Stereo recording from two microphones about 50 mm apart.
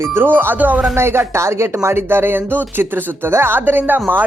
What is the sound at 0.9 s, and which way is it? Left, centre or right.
A woman's voice, right.